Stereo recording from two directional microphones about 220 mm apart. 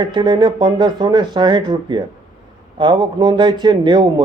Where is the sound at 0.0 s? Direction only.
20° right (ahead or behind).